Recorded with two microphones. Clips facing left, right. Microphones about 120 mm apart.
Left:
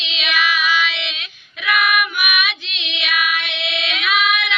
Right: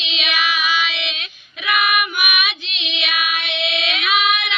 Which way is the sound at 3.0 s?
20° right (ahead or behind).